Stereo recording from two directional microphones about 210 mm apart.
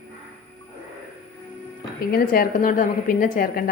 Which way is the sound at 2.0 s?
45° left (ahead or behind).